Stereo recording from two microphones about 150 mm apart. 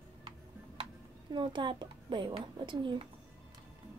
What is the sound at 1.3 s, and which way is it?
A child's voice, 30° right (ahead or behind).